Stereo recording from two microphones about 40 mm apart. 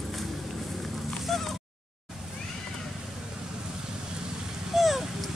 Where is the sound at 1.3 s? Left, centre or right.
Centre.